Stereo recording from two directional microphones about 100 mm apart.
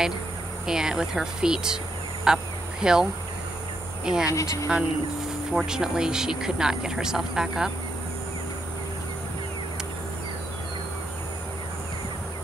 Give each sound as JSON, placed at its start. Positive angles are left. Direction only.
{"t": 0.7, "sound": "speech", "side_deg": -5}
{"t": 2.2, "sound": "honk", "side_deg": -5}
{"t": 4.0, "sound": "speech", "side_deg": -5}
{"t": 4.3, "sound": "speech", "side_deg": 30}
{"t": 5.5, "sound": "speech", "side_deg": -5}